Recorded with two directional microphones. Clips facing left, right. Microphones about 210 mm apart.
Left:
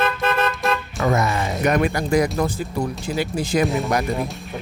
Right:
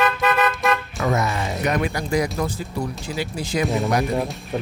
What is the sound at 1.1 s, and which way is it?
Speech, 50° left (ahead or behind).